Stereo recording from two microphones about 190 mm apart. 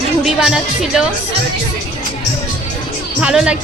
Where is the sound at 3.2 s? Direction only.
5° right (ahead or behind).